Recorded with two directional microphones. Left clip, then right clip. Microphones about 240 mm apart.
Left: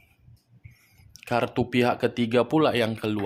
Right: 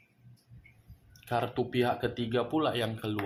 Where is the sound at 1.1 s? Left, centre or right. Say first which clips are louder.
Left 6 dB; left.